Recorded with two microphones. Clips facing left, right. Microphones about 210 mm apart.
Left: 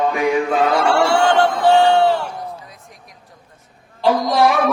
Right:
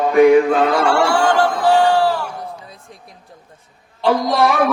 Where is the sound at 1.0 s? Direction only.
25° left (ahead or behind).